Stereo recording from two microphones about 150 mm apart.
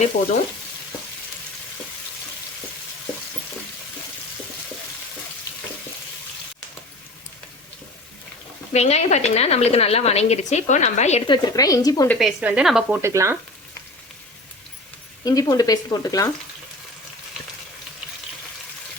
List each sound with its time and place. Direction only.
8.7 s a woman's voice: 45° left (ahead or behind)
11.3 s speech: 25° left (ahead or behind)
12.0 s a woman's voice: 5° left (ahead or behind)
12.4 s speech: 10° right (ahead or behind)
13.0 s speech: 20° right (ahead or behind)
15.2 s speech: 25° left (ahead or behind)